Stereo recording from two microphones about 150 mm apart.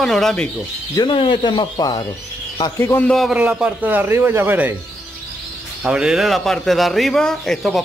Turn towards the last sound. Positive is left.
turn(degrees=0)  # may be behind; listen again after turning